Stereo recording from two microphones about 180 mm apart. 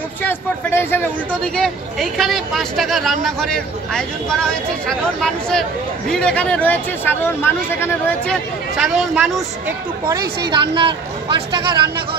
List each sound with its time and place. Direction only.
0.2 s speech: 10° left (ahead or behind)
8.7 s speech: centre (ahead or behind)
10.5 s speech: 25° right (ahead or behind)